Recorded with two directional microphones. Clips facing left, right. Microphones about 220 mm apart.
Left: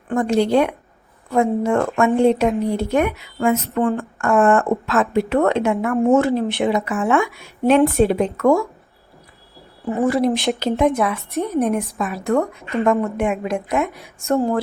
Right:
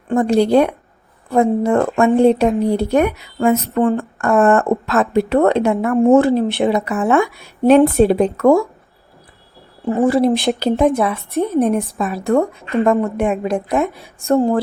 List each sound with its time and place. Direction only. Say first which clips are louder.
0.1 s speech: right 4 dB; 35° right (ahead or behind)
10.0 s a woman's voice: right 3 dB; 30° right (ahead or behind)